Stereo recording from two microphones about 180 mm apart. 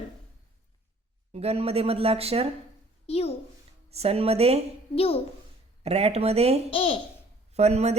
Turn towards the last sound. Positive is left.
turn(degrees=-35)  # may be behind; listen again after turning